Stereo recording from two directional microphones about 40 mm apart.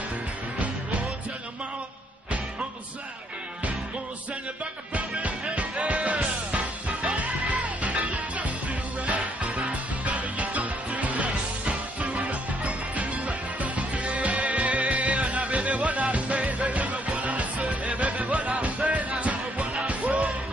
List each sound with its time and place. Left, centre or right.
4.9 s music: right
7.2 s music: right